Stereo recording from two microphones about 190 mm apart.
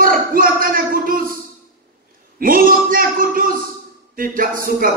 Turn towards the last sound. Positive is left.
turn(degrees=-50)  # may be behind; listen again after turning